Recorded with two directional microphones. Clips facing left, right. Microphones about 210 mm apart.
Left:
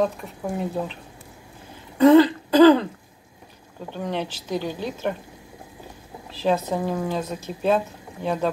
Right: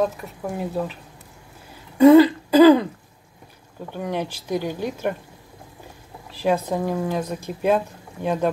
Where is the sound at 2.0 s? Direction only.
10° right (ahead or behind).